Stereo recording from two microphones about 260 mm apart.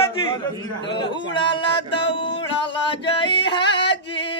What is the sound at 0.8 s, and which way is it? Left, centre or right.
Music, centre.